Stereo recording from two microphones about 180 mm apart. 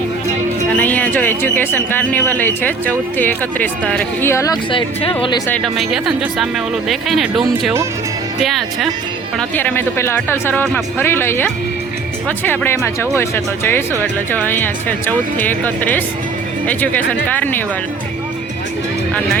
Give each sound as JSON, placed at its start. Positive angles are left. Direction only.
{"t": 0.8, "sound": "speech", "side_deg": 10}
{"t": 4.7, "sound": "speech", "side_deg": 30}
{"t": 5.5, "sound": "speech", "side_deg": 0}
{"t": 9.6, "sound": "speech", "side_deg": 10}
{"t": 12.5, "sound": "speech", "side_deg": 15}